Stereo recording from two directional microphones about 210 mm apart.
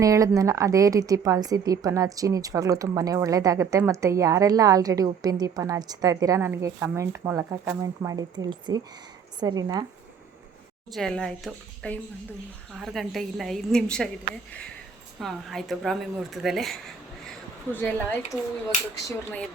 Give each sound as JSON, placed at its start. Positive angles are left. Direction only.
{"t": 0.0, "sound": "a woman's voice", "side_deg": -15}
{"t": 10.9, "sound": "speech", "side_deg": 5}
{"t": 15.2, "sound": "speech", "side_deg": 0}
{"t": 19.0, "sound": "speech", "side_deg": 5}